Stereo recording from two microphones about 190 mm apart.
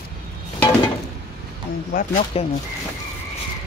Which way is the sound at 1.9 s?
45° left (ahead or behind).